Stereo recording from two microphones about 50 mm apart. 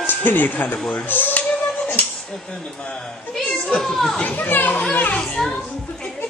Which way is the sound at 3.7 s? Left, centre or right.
Centre.